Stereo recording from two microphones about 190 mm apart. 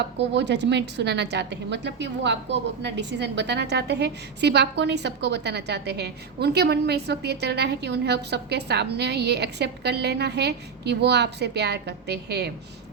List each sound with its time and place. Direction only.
0.0 s a woman's voice: 65° right (ahead or behind)